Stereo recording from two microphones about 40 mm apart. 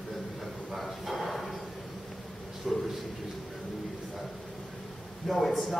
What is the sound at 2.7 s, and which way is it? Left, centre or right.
Speech, centre.